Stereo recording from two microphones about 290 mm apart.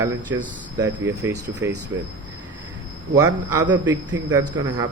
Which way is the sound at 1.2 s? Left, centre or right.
Centre.